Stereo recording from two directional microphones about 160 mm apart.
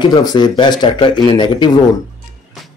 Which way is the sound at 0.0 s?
25° left (ahead or behind).